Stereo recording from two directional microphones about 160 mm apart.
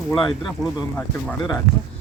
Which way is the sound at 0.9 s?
5° left (ahead or behind).